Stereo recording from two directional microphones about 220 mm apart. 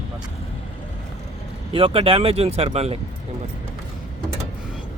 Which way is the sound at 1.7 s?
25° right (ahead or behind).